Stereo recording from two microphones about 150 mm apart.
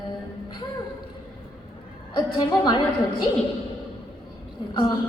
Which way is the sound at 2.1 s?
30° left (ahead or behind).